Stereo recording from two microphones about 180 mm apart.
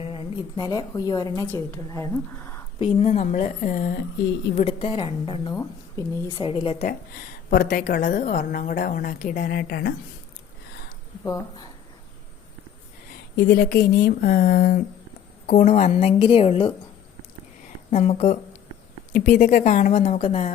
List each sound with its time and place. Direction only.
0.0 s a woman's voice: 30° left (ahead or behind)
2.7 s a woman's voice: 35° left (ahead or behind)
4.5 s a woman's voice: 35° left (ahead or behind)
6.8 s a woman's voice: 55° left (ahead or behind)
11.3 s a woman's voice: 20° left (ahead or behind)
13.3 s speech: 65° left (ahead or behind)
15.4 s a woman's voice: 40° left (ahead or behind)
17.9 s a woman's voice: 40° left (ahead or behind)
19.1 s a woman's voice: 50° left (ahead or behind)